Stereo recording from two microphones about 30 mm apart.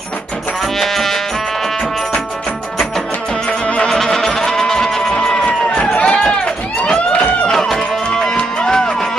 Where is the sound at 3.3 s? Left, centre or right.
Left.